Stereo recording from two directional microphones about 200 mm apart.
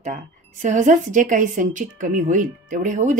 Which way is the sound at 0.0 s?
40° right (ahead or behind).